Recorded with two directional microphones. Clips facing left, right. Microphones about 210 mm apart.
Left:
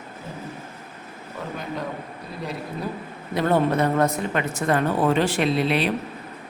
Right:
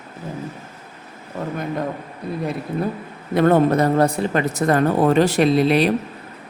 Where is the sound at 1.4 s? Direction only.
45° right (ahead or behind).